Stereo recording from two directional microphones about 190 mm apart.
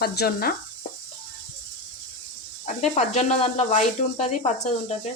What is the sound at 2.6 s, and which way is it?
Speech, 35° left (ahead or behind).